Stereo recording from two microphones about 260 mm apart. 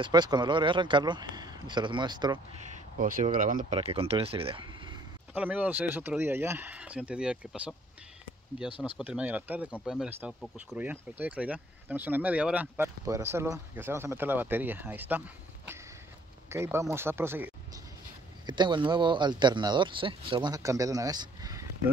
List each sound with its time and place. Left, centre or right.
0.0 s speech: centre
3.0 s speech: right
5.3 s speech: centre
8.6 s speech: centre
8.9 s a man's voice: centre